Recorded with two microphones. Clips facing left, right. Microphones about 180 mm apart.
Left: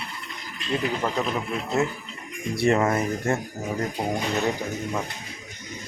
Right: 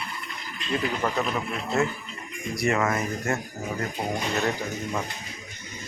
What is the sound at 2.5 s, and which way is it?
Speech, 30° left (ahead or behind).